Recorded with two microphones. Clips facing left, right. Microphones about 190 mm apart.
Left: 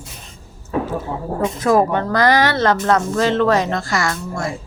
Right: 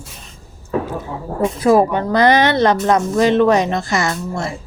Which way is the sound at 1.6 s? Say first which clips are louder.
Right 3 dB; 10° right (ahead or behind).